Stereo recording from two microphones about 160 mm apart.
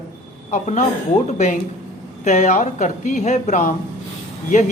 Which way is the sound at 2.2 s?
45° left (ahead or behind).